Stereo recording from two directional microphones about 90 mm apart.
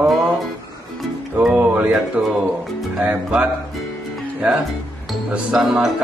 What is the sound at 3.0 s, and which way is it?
Music, 20° right (ahead or behind).